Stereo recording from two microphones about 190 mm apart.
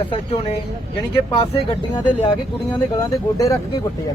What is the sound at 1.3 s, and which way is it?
Speech, 25° left (ahead or behind).